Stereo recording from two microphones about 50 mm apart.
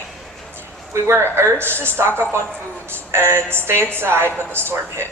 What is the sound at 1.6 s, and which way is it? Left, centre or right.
Speech, right.